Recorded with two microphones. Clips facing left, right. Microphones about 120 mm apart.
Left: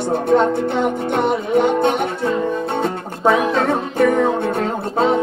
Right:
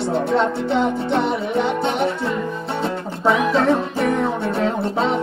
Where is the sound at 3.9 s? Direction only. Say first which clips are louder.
Left 4 dB; 55° left (ahead or behind).